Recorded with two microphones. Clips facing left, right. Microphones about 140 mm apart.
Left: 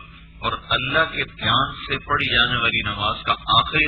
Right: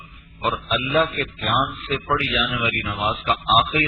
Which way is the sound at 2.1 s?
30° right (ahead or behind).